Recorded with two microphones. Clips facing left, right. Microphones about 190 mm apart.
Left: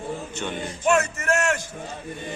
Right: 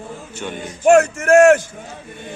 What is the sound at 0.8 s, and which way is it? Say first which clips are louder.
Speech: right 9 dB; 50° right (ahead or behind).